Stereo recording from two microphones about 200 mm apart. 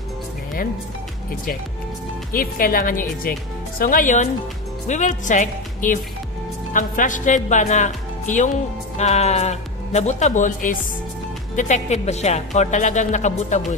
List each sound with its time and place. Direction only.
2.3 s speech: 45° left (ahead or behind)
8.9 s speech: 35° left (ahead or behind)